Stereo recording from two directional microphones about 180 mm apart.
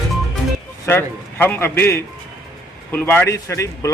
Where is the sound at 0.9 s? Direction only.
10° left (ahead or behind).